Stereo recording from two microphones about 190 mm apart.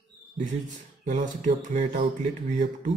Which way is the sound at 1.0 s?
40° right (ahead or behind).